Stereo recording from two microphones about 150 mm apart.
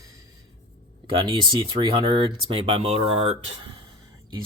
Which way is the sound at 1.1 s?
30° right (ahead or behind).